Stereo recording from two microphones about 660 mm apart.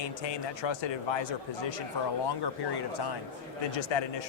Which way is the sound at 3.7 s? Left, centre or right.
Left.